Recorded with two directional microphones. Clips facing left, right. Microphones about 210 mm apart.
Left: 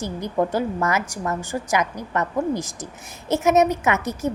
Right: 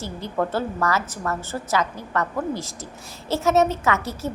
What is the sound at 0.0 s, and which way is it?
A woman's voice, 15° left (ahead or behind).